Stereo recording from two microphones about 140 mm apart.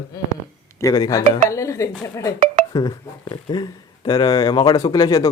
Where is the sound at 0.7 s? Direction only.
25° left (ahead or behind).